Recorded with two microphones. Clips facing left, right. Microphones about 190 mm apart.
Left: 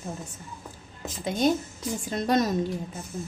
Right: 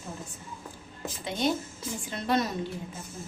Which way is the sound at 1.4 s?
45° left (ahead or behind).